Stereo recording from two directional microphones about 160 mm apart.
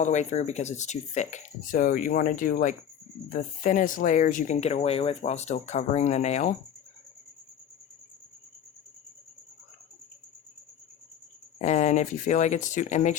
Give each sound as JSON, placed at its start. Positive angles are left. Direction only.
{"t": 0.0, "sound": "speech", "side_deg": 50}
{"t": 11.6, "sound": "speech", "side_deg": 45}